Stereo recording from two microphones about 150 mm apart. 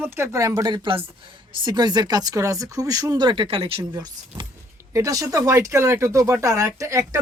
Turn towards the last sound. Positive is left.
turn(degrees=-20)  # may be behind; listen again after turning